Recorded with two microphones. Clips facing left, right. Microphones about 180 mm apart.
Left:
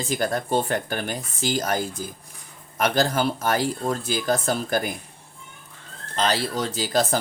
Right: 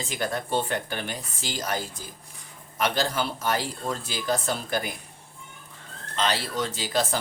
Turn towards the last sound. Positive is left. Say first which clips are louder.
# left 3 dB
turn(degrees=40)  # may be behind; listen again after turning